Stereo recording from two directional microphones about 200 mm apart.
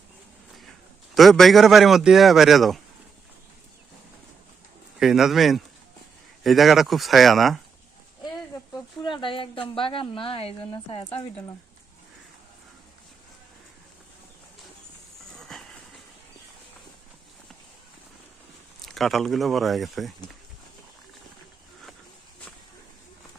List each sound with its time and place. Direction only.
1.1 s a man's voice: centre (ahead or behind)
4.9 s a man's voice: centre (ahead or behind)
9.0 s a woman's voice: 25° left (ahead or behind)
15.4 s a sound: 5° left (ahead or behind)
18.8 s a man's voice: centre (ahead or behind)